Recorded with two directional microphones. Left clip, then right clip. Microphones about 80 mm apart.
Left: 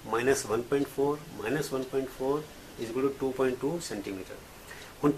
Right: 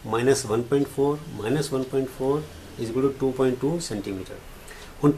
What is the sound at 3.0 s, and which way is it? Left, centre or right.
Speech, centre.